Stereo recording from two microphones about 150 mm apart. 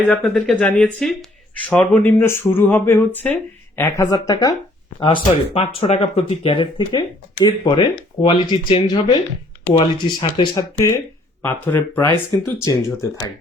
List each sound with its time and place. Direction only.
0.1 s speech: 10° left (ahead or behind); by 4.5 s 25° left (ahead or behind)
4.9 s speech: 35° left (ahead or behind)
11.4 s speech: 15° left (ahead or behind)